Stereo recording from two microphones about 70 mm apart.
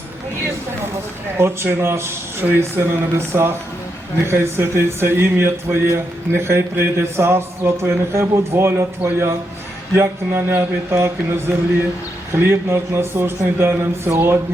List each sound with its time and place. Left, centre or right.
1.4 s speech: right
9.9 s speech: right